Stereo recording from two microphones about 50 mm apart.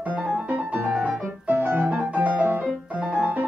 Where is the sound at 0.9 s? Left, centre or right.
Right.